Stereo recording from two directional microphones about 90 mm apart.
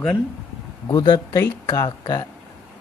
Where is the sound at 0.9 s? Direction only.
50° left (ahead or behind).